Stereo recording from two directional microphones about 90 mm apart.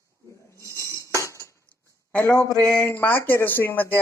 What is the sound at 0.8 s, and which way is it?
Cutlery, 35° left (ahead or behind).